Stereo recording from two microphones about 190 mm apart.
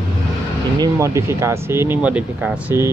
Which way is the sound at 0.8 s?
15° right (ahead or behind).